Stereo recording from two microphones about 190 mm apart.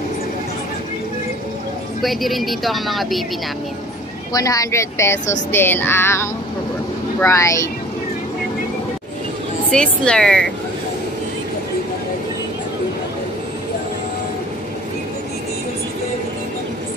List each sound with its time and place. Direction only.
2.0 s speech: centre (ahead or behind)
4.3 s speech: 20° left (ahead or behind)
9.7 s speech: 5° left (ahead or behind)